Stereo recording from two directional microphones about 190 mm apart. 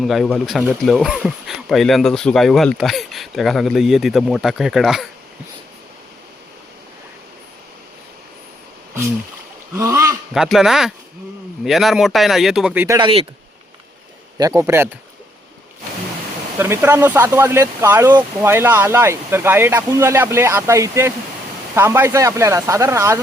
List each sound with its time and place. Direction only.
0.0 s speech: centre (ahead or behind)
9.7 s a sound: 15° right (ahead or behind)
10.3 s speech: 5° right (ahead or behind)
13.0 s speech: 30° right (ahead or behind)
14.3 s speech: 20° right (ahead or behind)
16.6 s speech: 10° right (ahead or behind)